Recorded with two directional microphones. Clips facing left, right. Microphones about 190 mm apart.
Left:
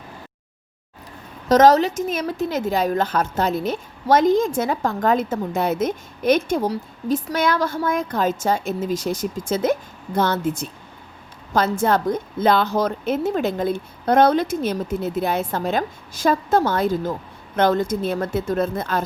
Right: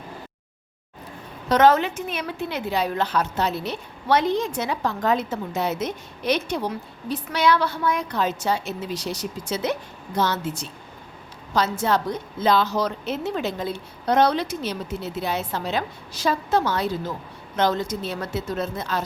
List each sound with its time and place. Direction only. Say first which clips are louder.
1.5 s a woman's voice: left 4 dB; 40° left (ahead or behind)